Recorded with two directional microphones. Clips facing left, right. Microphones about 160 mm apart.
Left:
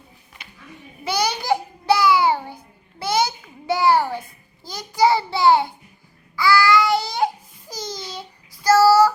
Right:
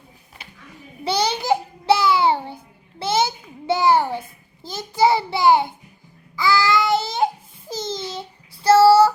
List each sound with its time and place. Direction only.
1.0 s babbling: 30° right (ahead or behind)
3.0 s a sound: 25° right (ahead or behind)
4.6 s child singing: 20° right (ahead or behind)
7.7 s babbling: 25° right (ahead or behind)
8.6 s child singing: 30° right (ahead or behind)